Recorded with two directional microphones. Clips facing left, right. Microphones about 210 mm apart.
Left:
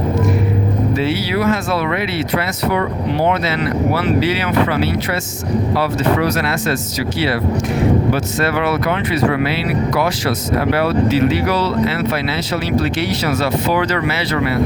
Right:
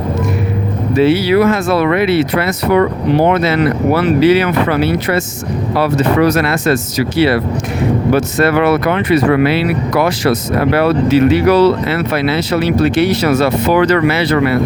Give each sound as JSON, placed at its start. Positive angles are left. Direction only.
{"t": 0.9, "sound": "speech", "side_deg": -60}
{"t": 8.1, "sound": "speech", "side_deg": -55}